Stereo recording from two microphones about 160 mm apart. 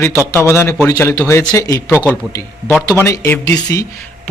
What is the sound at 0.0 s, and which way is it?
A man's voice, 15° left (ahead or behind).